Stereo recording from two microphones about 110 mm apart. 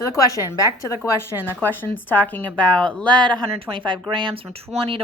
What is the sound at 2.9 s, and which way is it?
Speech, 45° right (ahead or behind).